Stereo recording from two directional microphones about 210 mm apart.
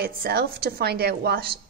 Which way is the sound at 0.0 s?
45° right (ahead or behind).